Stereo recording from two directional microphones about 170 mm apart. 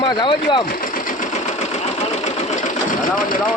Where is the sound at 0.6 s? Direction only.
55° left (ahead or behind).